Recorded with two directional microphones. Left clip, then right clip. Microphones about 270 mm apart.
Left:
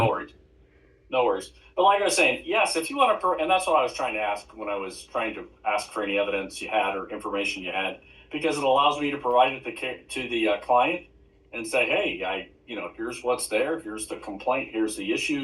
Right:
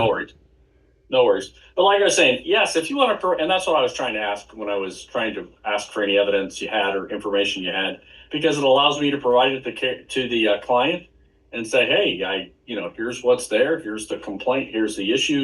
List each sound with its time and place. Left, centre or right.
0.0 s speech: right